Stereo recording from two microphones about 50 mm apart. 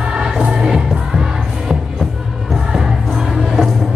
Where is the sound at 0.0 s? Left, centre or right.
Centre.